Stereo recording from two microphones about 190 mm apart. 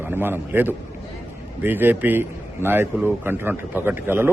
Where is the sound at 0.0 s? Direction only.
10° right (ahead or behind).